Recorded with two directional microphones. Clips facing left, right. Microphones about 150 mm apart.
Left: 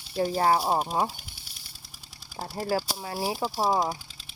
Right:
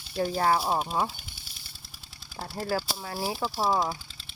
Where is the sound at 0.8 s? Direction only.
10° left (ahead or behind).